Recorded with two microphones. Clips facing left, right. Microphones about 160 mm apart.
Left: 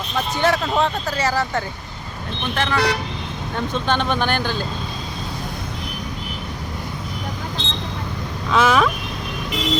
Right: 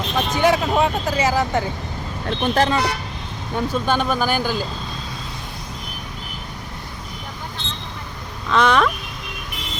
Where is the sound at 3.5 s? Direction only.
10° right (ahead or behind).